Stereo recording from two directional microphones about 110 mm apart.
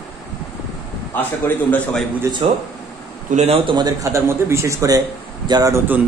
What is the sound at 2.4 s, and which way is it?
Speech, 65° right (ahead or behind).